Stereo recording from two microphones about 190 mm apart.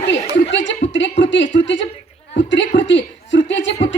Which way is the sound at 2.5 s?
70° left (ahead or behind).